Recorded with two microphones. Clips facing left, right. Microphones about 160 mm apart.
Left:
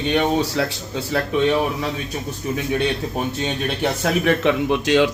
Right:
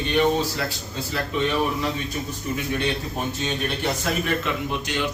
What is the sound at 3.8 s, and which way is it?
A man's voice, 75° left (ahead or behind).